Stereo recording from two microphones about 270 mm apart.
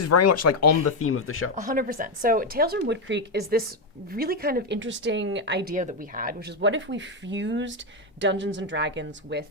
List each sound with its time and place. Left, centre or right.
0.0 s speech: left
1.5 s speech: right